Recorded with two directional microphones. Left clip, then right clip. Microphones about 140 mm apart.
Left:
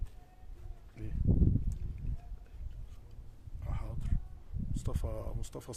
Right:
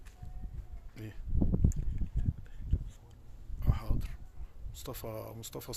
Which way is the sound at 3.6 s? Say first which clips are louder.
Right 6 dB; 25° right (ahead or behind).